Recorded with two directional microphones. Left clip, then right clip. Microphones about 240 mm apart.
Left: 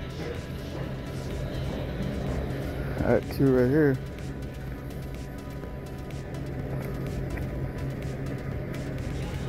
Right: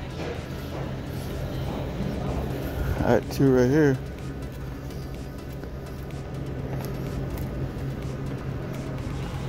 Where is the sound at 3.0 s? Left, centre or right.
Right.